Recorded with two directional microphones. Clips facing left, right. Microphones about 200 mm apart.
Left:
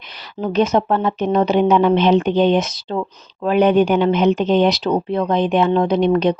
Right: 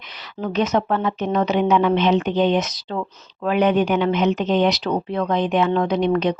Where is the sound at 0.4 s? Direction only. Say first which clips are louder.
Left 4 dB; 30° left (ahead or behind).